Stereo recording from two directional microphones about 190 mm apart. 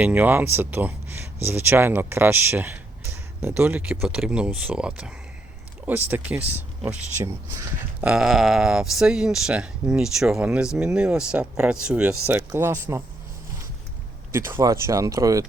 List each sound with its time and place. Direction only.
0.0 s speech: 10° right (ahead or behind)
8.0 s speech: 5° right (ahead or behind)
14.3 s speech: 15° right (ahead or behind)